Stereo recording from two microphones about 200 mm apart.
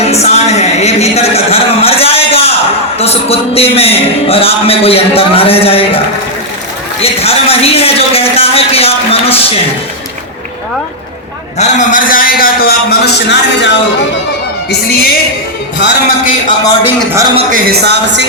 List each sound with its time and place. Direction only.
0.0 s a sound: 30° left (ahead or behind)
3.0 s music: 30° left (ahead or behind)
7.0 s speech: 30° left (ahead or behind)
11.5 s a man's voice: 35° left (ahead or behind); by 13.7 s 60° left (ahead or behind)
14.7 s a man's voice: 50° left (ahead or behind)
17.5 s speech: 55° right (ahead or behind)